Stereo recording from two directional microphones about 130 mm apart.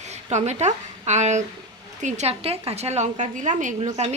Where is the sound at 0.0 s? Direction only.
60° right (ahead or behind).